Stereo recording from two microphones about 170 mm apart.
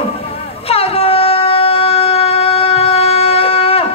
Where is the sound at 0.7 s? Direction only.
35° left (ahead or behind).